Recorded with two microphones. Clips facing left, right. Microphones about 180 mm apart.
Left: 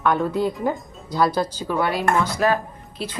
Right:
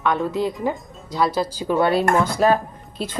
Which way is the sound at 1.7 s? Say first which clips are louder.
Right 7 dB; 25° right (ahead or behind).